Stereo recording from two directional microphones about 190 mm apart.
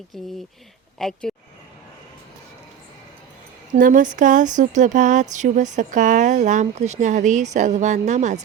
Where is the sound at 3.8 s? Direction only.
45° right (ahead or behind).